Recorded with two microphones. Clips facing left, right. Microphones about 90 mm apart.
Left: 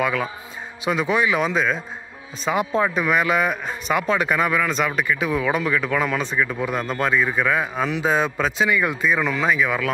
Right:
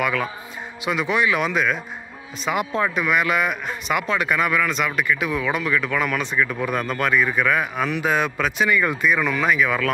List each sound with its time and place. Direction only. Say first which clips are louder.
0.0 s a man's voice: even; 30° left (ahead or behind)